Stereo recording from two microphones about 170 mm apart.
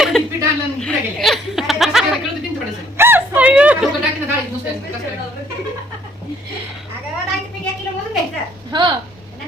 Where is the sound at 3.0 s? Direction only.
10° right (ahead or behind).